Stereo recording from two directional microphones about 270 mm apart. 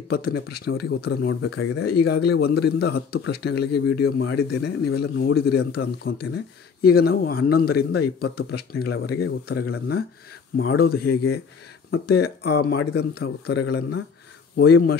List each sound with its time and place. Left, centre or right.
0.1 s speech: left